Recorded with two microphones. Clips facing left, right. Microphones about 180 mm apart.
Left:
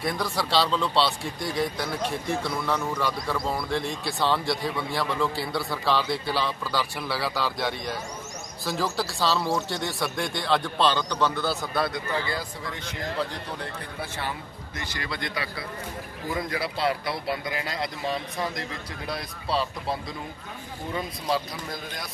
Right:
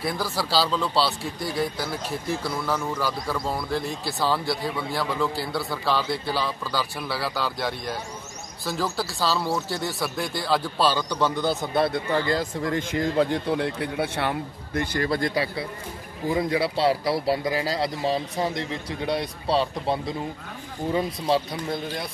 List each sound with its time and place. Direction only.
0.0 s a man's voice: 5° right (ahead or behind); by 11.9 s 25° right (ahead or behind)
11.9 s a man's voice: 50° right (ahead or behind)
13.9 s a man's voice: 70° right (ahead or behind); by 22.0 s 30° right (ahead or behind)